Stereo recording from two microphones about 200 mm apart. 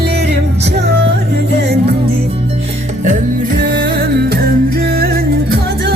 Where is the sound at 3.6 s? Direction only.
60° right (ahead or behind).